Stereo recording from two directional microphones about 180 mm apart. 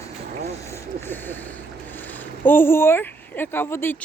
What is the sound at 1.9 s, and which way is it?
Speech, 10° left (ahead or behind).